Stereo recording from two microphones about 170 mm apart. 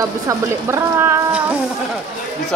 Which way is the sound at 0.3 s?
15° right (ahead or behind).